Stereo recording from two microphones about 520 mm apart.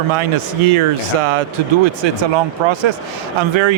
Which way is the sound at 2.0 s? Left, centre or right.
Right.